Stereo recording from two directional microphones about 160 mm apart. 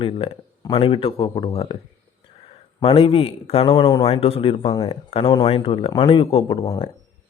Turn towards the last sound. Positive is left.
turn(degrees=25)  # may be behind; listen again after turning